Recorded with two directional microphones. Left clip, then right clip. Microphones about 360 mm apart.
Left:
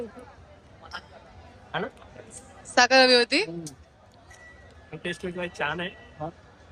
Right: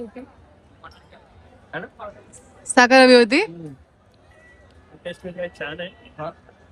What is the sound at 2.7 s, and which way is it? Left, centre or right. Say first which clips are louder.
Speech: right 6 dB; centre.